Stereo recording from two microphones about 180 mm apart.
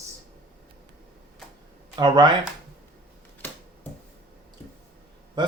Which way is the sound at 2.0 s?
25° right (ahead or behind).